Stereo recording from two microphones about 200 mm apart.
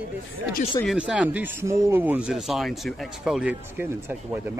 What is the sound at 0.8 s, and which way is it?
A man's voice, 5° right (ahead or behind).